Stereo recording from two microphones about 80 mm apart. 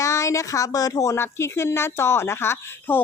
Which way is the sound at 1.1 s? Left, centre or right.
Left.